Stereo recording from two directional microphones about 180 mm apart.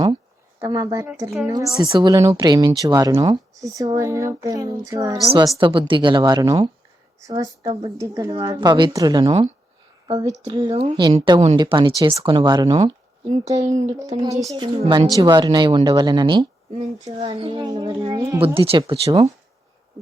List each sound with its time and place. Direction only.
0.6 s a woman's voice: 20° right (ahead or behind); by 14.2 s 40° right (ahead or behind)
14.4 s a woman's voice: 25° right (ahead or behind)